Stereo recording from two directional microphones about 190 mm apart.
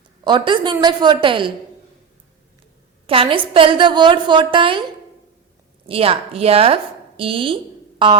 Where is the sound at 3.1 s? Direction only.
30° right (ahead or behind).